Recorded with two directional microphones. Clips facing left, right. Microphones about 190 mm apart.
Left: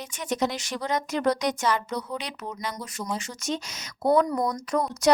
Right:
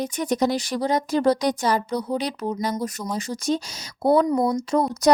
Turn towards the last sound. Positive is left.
turn(degrees=-25)  # may be behind; listen again after turning